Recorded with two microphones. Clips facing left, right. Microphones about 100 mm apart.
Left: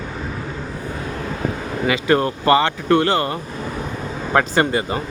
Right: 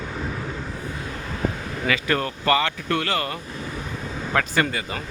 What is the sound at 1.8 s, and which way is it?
Speech, 25° left (ahead or behind).